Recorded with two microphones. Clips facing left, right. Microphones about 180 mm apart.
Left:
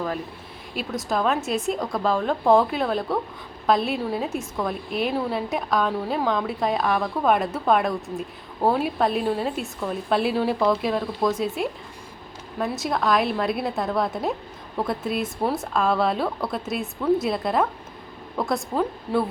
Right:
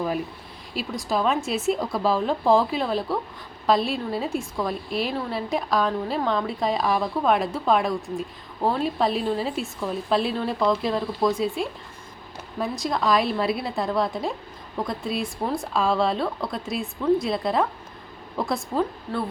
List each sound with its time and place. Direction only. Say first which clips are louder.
0.9 s a woman's voice: even; centre (ahead or behind)